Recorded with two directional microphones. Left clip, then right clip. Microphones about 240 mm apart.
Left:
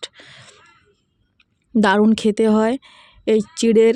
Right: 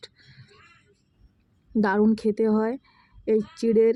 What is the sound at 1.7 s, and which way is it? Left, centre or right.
Speech, left.